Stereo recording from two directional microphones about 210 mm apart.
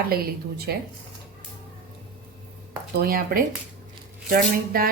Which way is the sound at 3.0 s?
45° right (ahead or behind).